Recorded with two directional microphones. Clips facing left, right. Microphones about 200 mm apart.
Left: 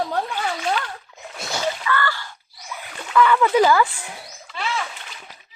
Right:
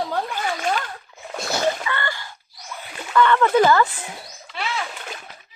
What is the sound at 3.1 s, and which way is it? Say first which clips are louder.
Speech: even; 5° left (ahead or behind).